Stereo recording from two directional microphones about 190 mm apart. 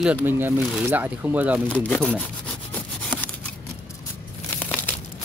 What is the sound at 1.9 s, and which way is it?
Rub, 5° left (ahead or behind).